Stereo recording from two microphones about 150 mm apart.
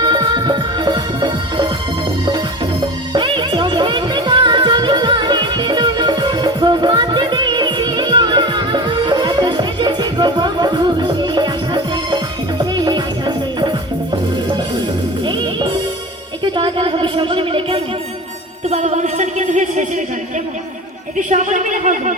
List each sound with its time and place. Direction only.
0.0 s music: 30° right (ahead or behind)
3.1 s music: 35° right (ahead or behind)
15.3 s music: 30° right (ahead or behind)
16.4 s a sound: 35° right (ahead or behind)
18.7 s music: 50° right (ahead or behind)
21.2 s speech: 55° right (ahead or behind)